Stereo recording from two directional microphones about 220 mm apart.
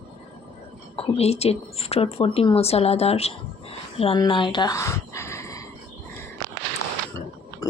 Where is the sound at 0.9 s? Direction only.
25° left (ahead or behind).